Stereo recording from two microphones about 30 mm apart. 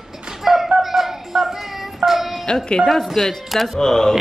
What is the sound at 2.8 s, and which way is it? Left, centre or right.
Speech, centre.